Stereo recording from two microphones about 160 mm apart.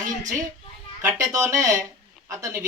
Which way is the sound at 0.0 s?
50° right (ahead or behind).